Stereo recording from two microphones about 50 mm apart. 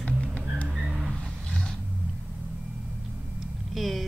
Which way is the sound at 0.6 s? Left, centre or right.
Centre.